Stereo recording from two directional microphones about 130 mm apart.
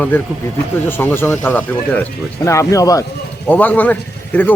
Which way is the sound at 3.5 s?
15° left (ahead or behind).